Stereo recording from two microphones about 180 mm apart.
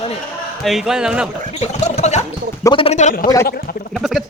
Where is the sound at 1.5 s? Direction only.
40° left (ahead or behind).